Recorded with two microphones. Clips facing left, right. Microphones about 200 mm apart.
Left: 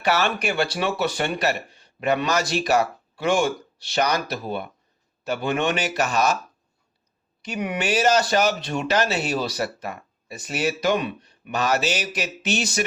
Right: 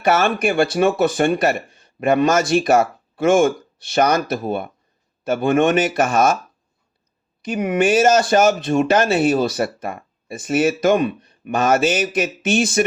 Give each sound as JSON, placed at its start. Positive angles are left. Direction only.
{"t": 0.0, "sound": "speech", "side_deg": -50}
{"t": 7.4, "sound": "speech", "side_deg": -50}